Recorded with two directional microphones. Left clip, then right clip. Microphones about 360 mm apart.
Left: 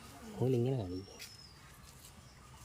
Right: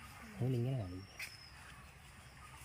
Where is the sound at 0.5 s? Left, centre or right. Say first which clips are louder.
Left 8 dB; centre.